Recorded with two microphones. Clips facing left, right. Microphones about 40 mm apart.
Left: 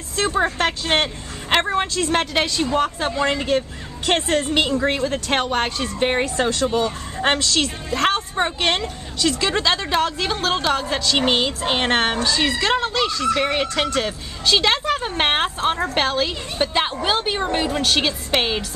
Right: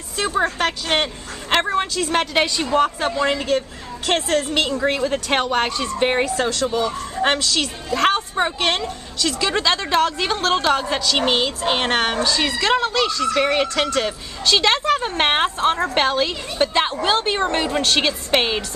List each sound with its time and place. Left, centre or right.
0.3 s speech: centre
5.0 s a woman's voice: centre
6.2 s speech: centre
6.6 s speech: left
7.2 s a woman's voice: centre